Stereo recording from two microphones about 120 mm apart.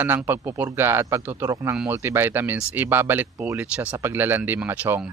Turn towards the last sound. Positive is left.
turn(degrees=-15)  # may be behind; listen again after turning